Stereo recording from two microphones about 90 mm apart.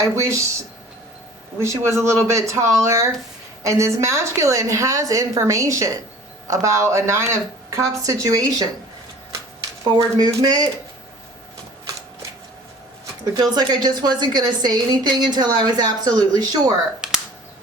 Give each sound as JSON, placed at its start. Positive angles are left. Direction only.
{"t": 0.2, "sound": "a woman's voice", "side_deg": -35}
{"t": 1.5, "sound": "a woman's voice", "side_deg": -30}
{"t": 10.2, "sound": "a woman's voice", "side_deg": -50}
{"t": 13.3, "sound": "a woman's voice", "side_deg": -50}
{"t": 17.0, "sound": "a sound", "side_deg": -5}